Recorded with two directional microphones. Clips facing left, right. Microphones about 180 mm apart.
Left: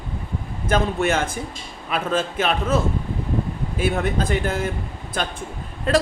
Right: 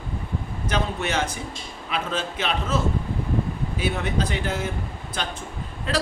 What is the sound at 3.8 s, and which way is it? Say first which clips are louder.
Speech: left 4 dB; 50° left (ahead or behind).